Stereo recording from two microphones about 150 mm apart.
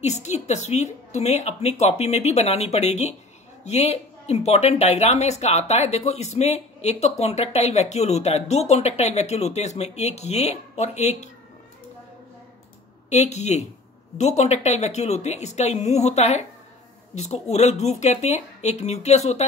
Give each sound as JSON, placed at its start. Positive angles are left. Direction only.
{"t": 0.0, "sound": "speech", "side_deg": 50}
{"t": 13.1, "sound": "speech", "side_deg": 50}